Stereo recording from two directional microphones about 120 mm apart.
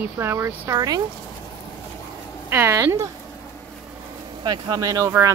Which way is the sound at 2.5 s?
20° right (ahead or behind).